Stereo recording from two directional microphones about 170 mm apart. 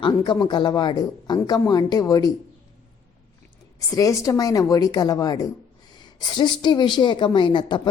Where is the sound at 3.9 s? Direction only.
20° left (ahead or behind).